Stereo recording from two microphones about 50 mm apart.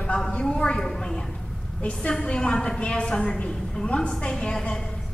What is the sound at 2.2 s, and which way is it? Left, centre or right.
A woman's voice, centre.